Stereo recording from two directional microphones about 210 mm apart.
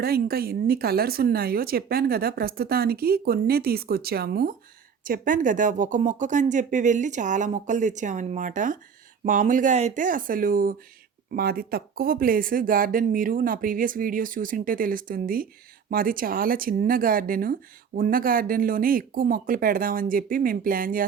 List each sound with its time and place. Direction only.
0.0 s speech: 45° right (ahead or behind)